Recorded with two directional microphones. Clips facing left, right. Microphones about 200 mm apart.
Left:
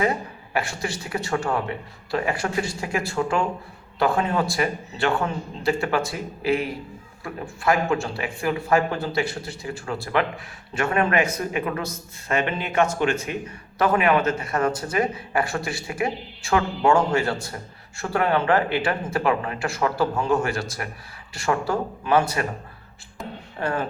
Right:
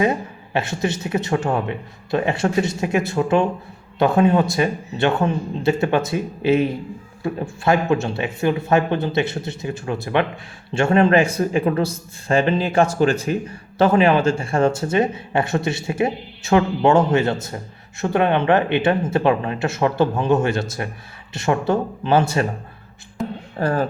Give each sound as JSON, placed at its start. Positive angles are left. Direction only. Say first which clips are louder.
{"t": 0.0, "sound": "a man's voice", "louder": "right 4 dB", "side_deg": -20}
{"t": 23.6, "sound": "speech", "louder": "right 5 dB", "side_deg": -35}